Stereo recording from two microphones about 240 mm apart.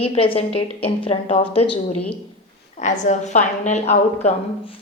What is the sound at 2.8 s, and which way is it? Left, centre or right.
A woman's voice, left.